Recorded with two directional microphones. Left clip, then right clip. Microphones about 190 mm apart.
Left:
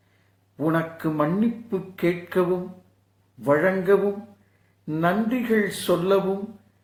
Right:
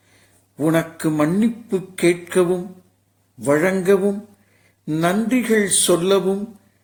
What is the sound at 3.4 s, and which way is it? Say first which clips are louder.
Speech: right 3 dB; 45° right (ahead or behind).